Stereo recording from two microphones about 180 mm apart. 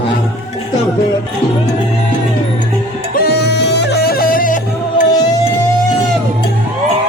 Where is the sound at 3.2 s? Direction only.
65° left (ahead or behind); by 5.0 s 50° left (ahead or behind).